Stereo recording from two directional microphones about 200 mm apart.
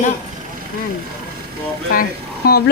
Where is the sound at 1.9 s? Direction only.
45° left (ahead or behind).